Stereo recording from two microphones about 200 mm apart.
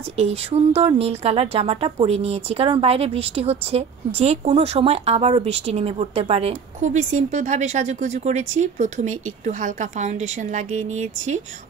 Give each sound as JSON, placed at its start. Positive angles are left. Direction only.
{"t": 0.2, "sound": "a woman's voice", "side_deg": -30}